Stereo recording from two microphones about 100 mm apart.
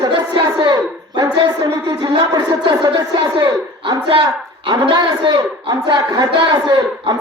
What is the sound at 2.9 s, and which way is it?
A woman's voice, 55° right (ahead or behind).